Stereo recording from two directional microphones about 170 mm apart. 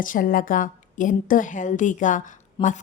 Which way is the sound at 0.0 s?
55° left (ahead or behind).